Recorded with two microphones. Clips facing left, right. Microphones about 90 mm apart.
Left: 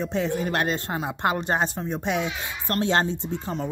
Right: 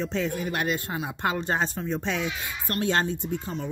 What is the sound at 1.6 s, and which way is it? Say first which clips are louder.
Speech: left 1 dB; 20° left (ahead or behind).